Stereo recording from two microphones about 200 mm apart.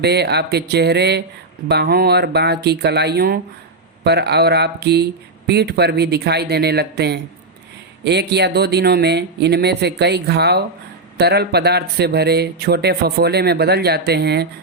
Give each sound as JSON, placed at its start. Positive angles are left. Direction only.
{"t": 0.0, "sound": "speech", "side_deg": -55}